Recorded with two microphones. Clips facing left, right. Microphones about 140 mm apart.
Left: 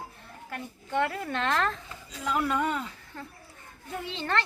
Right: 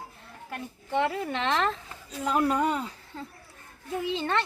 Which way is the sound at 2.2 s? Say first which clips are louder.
Right 3 dB; 30° right (ahead or behind).